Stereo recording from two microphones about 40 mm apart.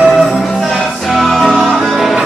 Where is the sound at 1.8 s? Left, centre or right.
Centre.